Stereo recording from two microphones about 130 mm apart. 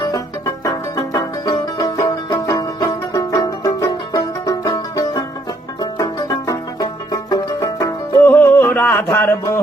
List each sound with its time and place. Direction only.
0.0 s music: 30° left (ahead or behind)